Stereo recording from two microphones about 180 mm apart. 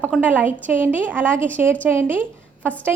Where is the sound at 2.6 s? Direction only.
10° left (ahead or behind).